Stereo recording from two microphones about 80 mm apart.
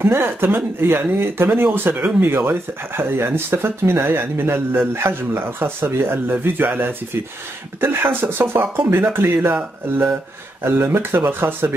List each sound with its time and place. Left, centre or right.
0.0 s speech: right